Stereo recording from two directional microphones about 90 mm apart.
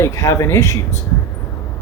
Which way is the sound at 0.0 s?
35° left (ahead or behind).